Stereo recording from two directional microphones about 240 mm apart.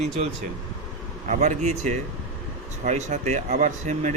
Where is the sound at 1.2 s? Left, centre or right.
Right.